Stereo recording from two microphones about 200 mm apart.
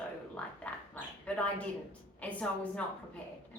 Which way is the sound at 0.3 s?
5° left (ahead or behind).